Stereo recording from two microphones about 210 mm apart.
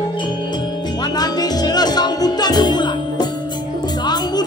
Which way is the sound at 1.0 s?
20° left (ahead or behind).